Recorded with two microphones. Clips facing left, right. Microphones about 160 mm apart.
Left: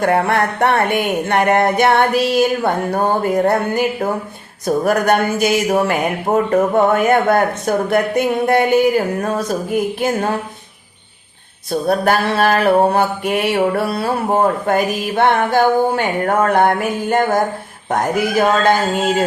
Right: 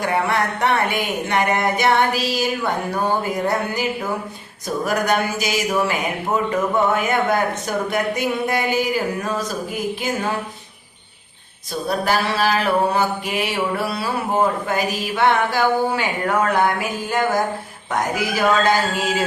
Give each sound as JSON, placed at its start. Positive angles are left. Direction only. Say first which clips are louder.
{"t": 0.0, "sound": "mantra", "louder": "left 5 dB", "side_deg": 55}
{"t": 11.7, "sound": "mantra", "louder": "left 5 dB", "side_deg": 55}
{"t": 18.9, "sound": "mantra", "louder": "left 5 dB", "side_deg": 55}